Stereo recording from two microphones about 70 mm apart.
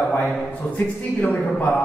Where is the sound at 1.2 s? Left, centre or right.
Left.